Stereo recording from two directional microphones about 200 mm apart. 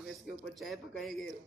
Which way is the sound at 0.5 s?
Centre (ahead or behind).